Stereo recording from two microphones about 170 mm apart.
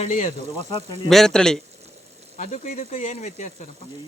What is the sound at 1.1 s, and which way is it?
Speech, 5° left (ahead or behind).